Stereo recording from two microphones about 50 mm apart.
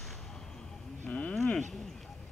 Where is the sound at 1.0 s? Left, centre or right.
Left.